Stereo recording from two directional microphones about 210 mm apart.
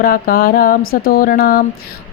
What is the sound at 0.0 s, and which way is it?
Speech, 45° left (ahead or behind).